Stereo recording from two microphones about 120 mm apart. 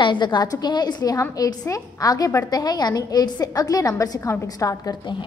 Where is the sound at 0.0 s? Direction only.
40° left (ahead or behind).